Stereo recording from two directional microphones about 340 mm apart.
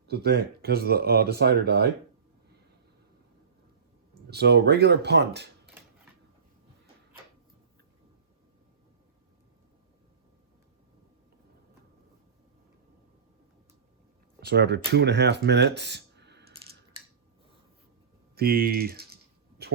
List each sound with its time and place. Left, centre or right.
0.1 s speech: right
4.3 s speech: right
14.4 s speech: right
18.3 s typing: right